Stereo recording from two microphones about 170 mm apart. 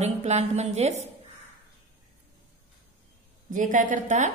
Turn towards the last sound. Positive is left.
turn(degrees=-45)  # may be behind; listen again after turning